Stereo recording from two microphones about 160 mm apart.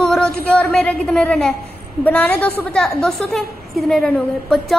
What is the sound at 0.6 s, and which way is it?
A woman's voice, 5° left (ahead or behind).